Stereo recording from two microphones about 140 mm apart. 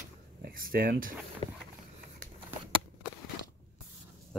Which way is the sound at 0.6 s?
90° right.